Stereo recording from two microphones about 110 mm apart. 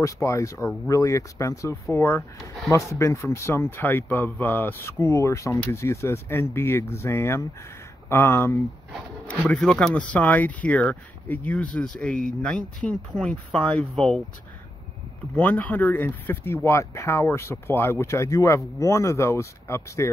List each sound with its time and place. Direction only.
0.0 s speech: 30° left (ahead or behind)
9.5 s speech: 5° left (ahead or behind)
15.3 s speech: 15° left (ahead or behind)